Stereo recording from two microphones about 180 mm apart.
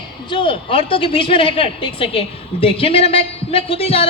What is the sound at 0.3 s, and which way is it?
Speech, 30° left (ahead or behind).